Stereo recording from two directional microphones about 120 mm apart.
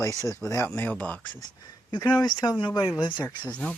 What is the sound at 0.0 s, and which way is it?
Speech, 25° left (ahead or behind).